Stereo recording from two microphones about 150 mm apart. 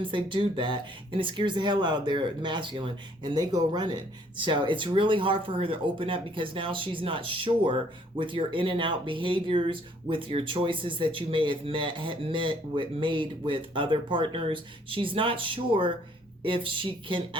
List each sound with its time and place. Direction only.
0.0 s speech: 35° right (ahead or behind)